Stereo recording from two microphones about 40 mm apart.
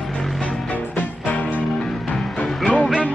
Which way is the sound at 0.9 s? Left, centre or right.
Left.